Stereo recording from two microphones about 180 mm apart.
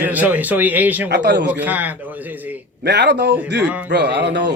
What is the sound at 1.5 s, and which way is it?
Speech, 10° right (ahead or behind).